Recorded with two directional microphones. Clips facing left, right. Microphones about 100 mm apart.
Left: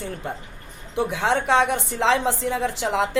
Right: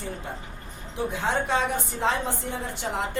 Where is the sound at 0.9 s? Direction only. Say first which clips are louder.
Left 5 dB; 75° left (ahead or behind).